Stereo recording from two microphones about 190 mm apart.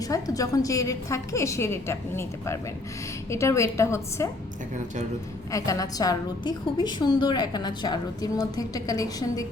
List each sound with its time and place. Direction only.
0.0 s a woman's voice: 20° left (ahead or behind)
5.5 s a woman's voice: 15° left (ahead or behind)